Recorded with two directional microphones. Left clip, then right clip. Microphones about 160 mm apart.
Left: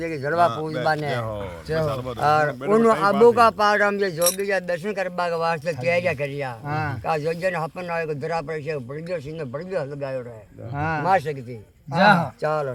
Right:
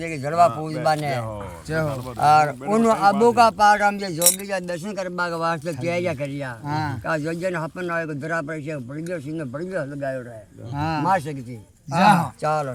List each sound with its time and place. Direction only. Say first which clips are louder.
0.0 s a man's voice: right 2 dB; 10° left (ahead or behind); by 6.4 s 30° left (ahead or behind)
6.7 s a man's voice: right 2 dB; 10° left (ahead or behind)
7.0 s speech: left 4 dB; 30° left (ahead or behind)
10.8 s speech: even; centre (ahead or behind)
11.0 s speech: left 2 dB; 20° left (ahead or behind)
11.9 s speech: even; 10° right (ahead or behind)
12.4 s a man's voice: right 1 dB; 20° left (ahead or behind)